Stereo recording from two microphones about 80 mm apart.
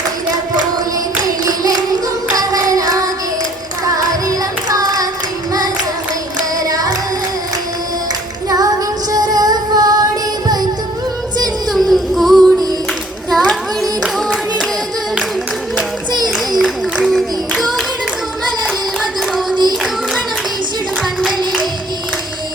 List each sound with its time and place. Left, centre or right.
1.2 s a sound: right
2.3 s child singing: right
4.7 s a sound: right
6.6 s singing: right
8.4 s female singing: right
11.7 s child singing: centre
13.3 s clapping: centre
16.5 s music: centre
21.2 s a sound: centre